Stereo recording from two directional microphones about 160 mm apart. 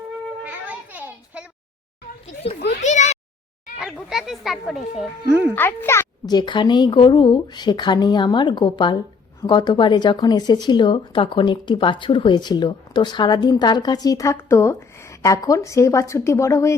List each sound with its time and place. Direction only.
0.4 s children playing: 10° right (ahead or behind)
2.6 s speech: 45° left (ahead or behind)
3.8 s speech: centre (ahead or behind)
5.5 s a child's voice: 15° left (ahead or behind)
6.3 s speech: 30° left (ahead or behind)